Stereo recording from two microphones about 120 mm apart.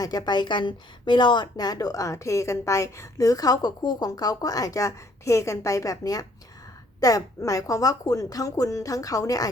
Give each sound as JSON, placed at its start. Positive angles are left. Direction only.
{"t": 0.0, "sound": "a woman's voice", "side_deg": 35}